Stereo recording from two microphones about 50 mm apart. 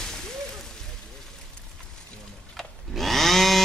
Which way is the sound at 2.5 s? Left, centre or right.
Centre.